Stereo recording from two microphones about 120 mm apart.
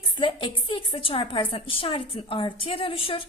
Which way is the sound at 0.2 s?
45° left (ahead or behind).